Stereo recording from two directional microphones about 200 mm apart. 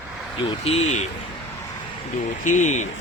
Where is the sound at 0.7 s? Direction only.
35° left (ahead or behind).